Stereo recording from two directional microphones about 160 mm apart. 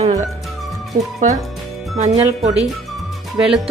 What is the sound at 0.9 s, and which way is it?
Speech, 55° right (ahead or behind).